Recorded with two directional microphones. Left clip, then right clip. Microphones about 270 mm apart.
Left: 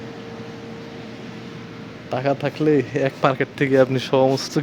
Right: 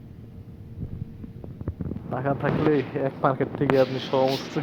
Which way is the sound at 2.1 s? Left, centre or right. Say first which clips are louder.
Left 4 dB; left.